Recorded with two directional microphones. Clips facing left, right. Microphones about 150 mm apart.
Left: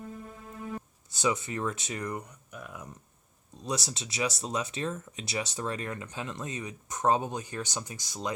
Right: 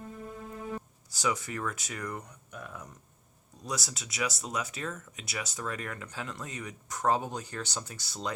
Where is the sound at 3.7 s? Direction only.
25° left (ahead or behind).